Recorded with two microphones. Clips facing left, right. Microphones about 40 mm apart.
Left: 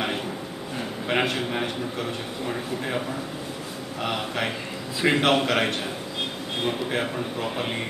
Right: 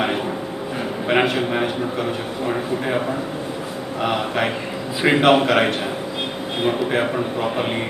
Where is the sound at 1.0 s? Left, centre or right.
Centre.